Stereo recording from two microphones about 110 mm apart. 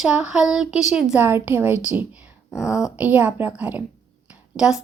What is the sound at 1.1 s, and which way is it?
A woman's voice, 20° right (ahead or behind).